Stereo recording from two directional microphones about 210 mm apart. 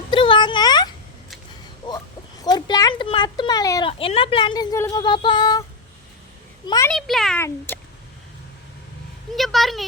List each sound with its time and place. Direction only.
0.1 s a sound: 25° left (ahead or behind)
2.4 s speech: 20° left (ahead or behind)
6.7 s a child's voice: 15° left (ahead or behind)
6.9 s a child's voice: centre (ahead or behind)
7.7 s a sound: 10° left (ahead or behind)
9.3 s a child's voice: centre (ahead or behind)